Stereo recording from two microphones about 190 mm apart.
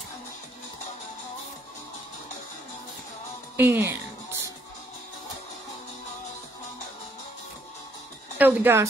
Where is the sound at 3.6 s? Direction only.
10° right (ahead or behind).